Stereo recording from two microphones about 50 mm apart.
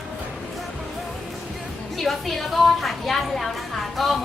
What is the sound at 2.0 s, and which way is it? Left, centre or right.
A woman's voice, centre.